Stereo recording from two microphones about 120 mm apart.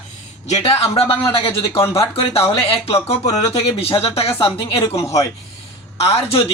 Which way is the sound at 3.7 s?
50° left (ahead or behind).